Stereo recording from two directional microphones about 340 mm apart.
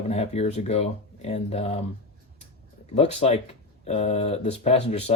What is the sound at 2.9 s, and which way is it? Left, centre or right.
Speech, centre.